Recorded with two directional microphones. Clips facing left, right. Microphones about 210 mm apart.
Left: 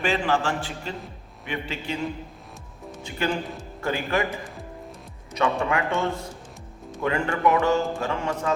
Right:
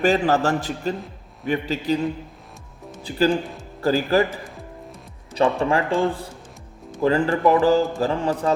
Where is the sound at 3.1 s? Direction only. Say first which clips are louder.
Right 7 dB; 35° right (ahead or behind).